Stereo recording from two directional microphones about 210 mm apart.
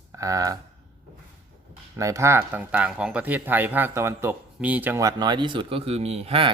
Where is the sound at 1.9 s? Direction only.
15° right (ahead or behind).